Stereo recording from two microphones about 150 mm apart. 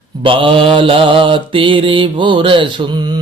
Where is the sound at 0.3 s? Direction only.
35° right (ahead or behind).